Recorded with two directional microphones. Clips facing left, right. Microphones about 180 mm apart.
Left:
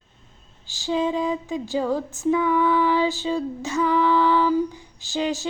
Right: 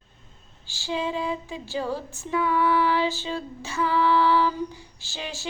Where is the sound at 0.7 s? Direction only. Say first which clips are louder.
Left 5 dB; 15° left (ahead or behind).